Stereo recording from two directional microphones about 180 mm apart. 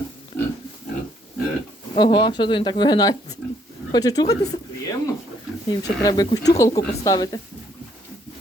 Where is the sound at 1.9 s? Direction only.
25° left (ahead or behind).